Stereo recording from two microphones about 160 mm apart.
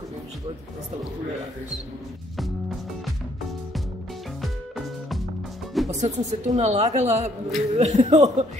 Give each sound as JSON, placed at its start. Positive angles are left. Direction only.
{"t": 5.9, "sound": "a woman's voice", "side_deg": -45}